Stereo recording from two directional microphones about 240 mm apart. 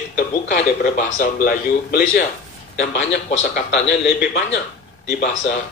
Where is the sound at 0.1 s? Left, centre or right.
Left.